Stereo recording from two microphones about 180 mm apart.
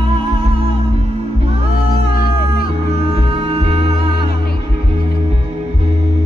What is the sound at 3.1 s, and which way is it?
Music, 30° right (ahead or behind).